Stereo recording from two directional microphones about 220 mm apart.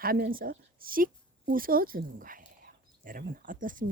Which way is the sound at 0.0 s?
40° right (ahead or behind).